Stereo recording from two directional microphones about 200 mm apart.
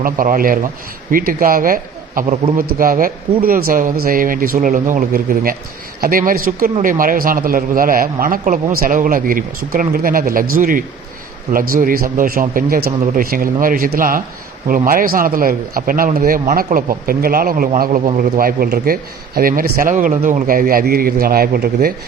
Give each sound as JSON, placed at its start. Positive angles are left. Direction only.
{"t": 0.0, "sound": "a man's voice", "side_deg": -45}